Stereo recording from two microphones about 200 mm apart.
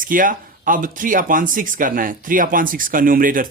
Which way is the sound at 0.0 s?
45° right (ahead or behind).